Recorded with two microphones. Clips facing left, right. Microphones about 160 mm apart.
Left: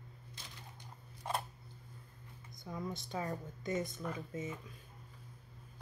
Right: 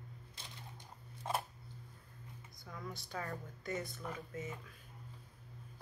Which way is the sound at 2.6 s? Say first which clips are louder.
Left 6 dB; 20° left (ahead or behind).